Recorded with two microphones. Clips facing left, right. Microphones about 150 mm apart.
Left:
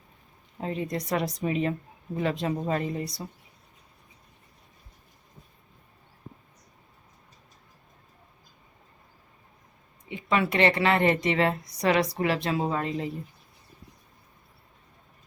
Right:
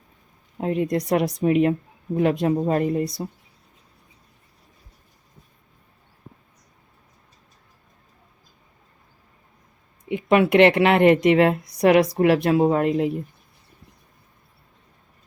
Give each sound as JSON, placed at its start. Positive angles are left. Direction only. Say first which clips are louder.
{"t": 0.6, "sound": "a woman's voice", "louder": "right 8 dB", "side_deg": -60}
{"t": 10.1, "sound": "a woman's voice", "louder": "right 9 dB", "side_deg": -60}